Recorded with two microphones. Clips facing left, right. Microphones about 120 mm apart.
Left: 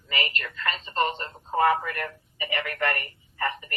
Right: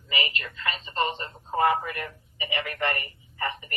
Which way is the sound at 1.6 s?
25° right (ahead or behind).